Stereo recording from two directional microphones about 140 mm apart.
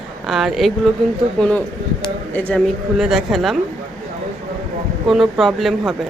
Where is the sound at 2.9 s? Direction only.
5° right (ahead or behind).